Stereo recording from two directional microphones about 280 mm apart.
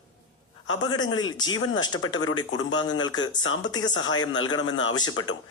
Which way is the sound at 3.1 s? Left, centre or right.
Left.